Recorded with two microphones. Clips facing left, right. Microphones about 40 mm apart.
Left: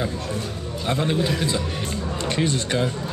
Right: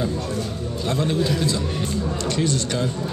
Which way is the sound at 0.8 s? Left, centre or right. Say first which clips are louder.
Even; left.